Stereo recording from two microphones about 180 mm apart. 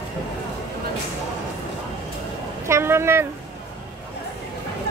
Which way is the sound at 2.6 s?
15° right (ahead or behind).